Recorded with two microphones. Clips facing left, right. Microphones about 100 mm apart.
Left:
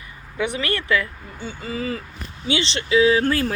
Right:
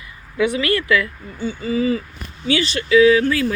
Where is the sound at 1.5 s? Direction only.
45° left (ahead or behind).